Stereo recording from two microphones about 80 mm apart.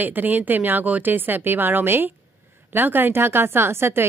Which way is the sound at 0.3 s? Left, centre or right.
Right.